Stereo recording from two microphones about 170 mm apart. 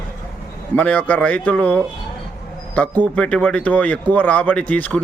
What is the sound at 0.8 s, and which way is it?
Speech, 10° left (ahead or behind).